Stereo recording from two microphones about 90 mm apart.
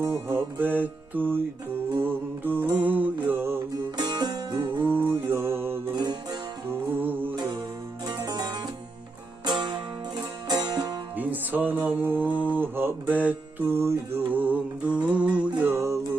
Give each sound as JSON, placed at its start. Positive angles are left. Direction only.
{"t": 0.0, "sound": "music", "side_deg": -30}
{"t": 2.0, "sound": "mantra", "side_deg": -20}
{"t": 3.9, "sound": "music", "side_deg": -50}
{"t": 4.8, "sound": "music", "side_deg": -25}
{"t": 8.0, "sound": "music", "side_deg": -50}
{"t": 11.2, "sound": "music", "side_deg": -20}
{"t": 12.5, "sound": "mantra", "side_deg": -25}
{"t": 14.3, "sound": "music", "side_deg": -20}